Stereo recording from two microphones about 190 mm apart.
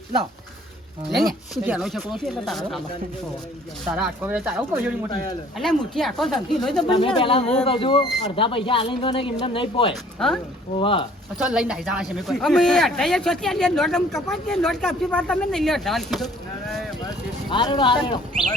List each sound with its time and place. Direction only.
1.1 s speech: centre (ahead or behind)
3.8 s speech: 5° right (ahead or behind)
5.5 s speech: centre (ahead or behind)
6.8 s speech: 25° left (ahead or behind)
9.9 s speech: centre (ahead or behind)
10.8 s speech: 25° left (ahead or behind)
11.3 s speech: 5° right (ahead or behind)
17.5 s speech: 25° left (ahead or behind)